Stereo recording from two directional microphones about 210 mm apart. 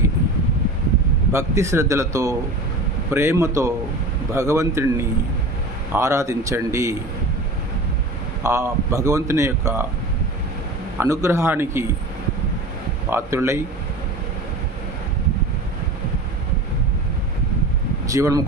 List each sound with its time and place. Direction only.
1.3 s speech: 15° right (ahead or behind)
5.9 s speech: 15° right (ahead or behind)
8.4 s speech: 15° right (ahead or behind)
11.0 s speech: 10° right (ahead or behind)
13.1 s speech: 10° right (ahead or behind)
18.1 s speech: 15° right (ahead or behind)